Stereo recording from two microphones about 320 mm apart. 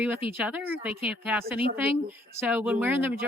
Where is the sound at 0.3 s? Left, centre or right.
Centre.